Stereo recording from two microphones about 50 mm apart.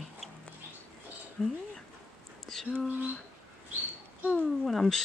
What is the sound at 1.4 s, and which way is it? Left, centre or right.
Speech, centre.